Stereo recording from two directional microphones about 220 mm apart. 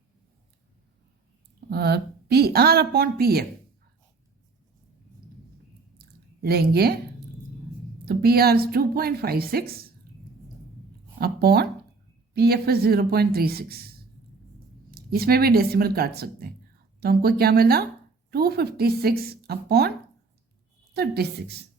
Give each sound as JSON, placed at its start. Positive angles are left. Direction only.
{"t": 1.7, "sound": "a woman's voice", "side_deg": -45}
{"t": 6.4, "sound": "a woman's voice", "side_deg": -45}
{"t": 8.0, "sound": "a woman's voice", "side_deg": -45}
{"t": 11.2, "sound": "a woman's voice", "side_deg": -45}
{"t": 20.9, "sound": "a woman's voice", "side_deg": -45}